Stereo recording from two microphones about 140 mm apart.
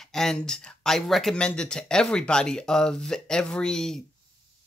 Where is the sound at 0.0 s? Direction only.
5° left (ahead or behind).